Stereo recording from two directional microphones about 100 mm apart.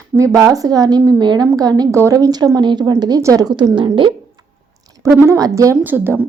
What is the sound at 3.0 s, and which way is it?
Speech, 35° right (ahead or behind).